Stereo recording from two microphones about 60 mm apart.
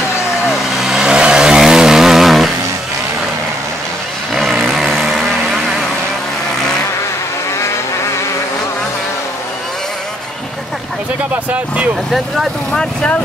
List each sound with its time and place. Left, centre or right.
0.5 s vehicle: centre
4.4 s vehicle: centre
11.5 s speech: right
12.7 s speech: centre